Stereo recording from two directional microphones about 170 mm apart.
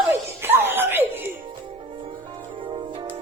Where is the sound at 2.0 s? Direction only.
30° right (ahead or behind).